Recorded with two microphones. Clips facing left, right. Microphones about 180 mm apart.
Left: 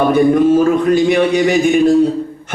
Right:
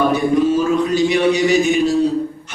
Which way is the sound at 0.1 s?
55° left (ahead or behind).